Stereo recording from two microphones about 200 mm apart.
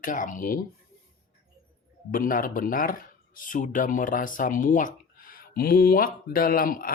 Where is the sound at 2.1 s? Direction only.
45° left (ahead or behind).